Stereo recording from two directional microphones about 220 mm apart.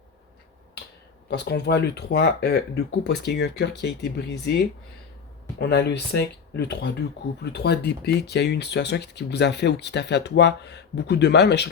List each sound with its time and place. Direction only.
1.3 s speech: 50° left (ahead or behind)